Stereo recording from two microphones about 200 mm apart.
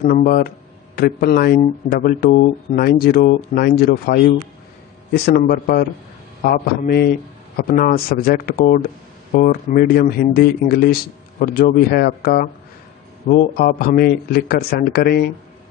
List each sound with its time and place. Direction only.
0.0 s a man's voice: 45° left (ahead or behind)